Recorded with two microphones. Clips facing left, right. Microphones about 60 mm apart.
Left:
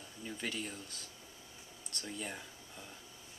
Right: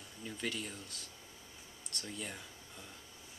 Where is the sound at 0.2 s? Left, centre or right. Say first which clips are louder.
Even; centre.